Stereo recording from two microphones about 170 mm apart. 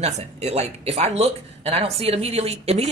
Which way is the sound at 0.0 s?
40° right (ahead or behind).